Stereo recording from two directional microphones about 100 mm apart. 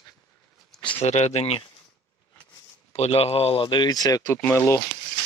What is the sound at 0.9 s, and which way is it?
Speech, 90° left.